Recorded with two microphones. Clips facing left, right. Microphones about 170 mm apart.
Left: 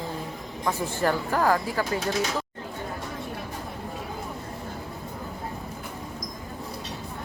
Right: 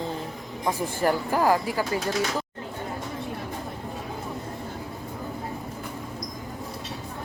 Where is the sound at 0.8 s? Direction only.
10° right (ahead or behind).